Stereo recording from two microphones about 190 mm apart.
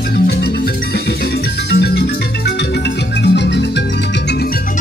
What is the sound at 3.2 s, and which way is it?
Music, 65° left (ahead or behind).